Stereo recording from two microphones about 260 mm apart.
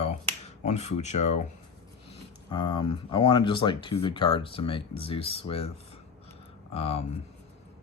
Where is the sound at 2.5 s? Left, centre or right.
Centre.